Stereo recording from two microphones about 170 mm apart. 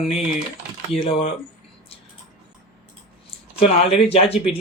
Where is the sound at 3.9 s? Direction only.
35° left (ahead or behind).